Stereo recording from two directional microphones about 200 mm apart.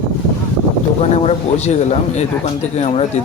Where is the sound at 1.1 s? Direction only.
30° left (ahead or behind).